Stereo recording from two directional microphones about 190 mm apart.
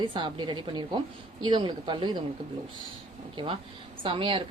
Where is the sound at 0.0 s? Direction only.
25° right (ahead or behind).